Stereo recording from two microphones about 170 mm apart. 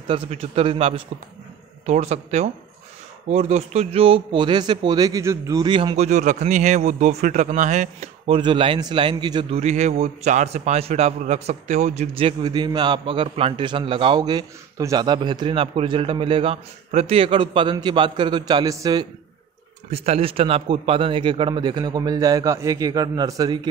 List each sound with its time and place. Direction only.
0.1 s a man's voice: 35° right (ahead or behind)
6.0 s a man's voice: 45° right (ahead or behind)
8.4 s a man's voice: 30° right (ahead or behind)
9.6 s a man's voice: 40° right (ahead or behind); by 19.0 s 20° right (ahead or behind)
19.9 s a man's voice: 35° right (ahead or behind)